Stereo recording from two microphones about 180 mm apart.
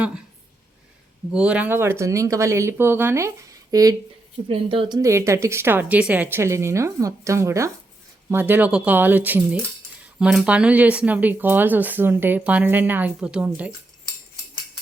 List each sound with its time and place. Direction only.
1.3 s speech: 5° right (ahead or behind)